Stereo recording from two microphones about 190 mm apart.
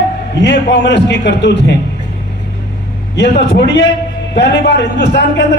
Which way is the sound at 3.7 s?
65° left (ahead or behind).